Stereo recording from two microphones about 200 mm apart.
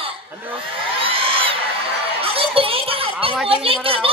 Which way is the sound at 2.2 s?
30° right (ahead or behind).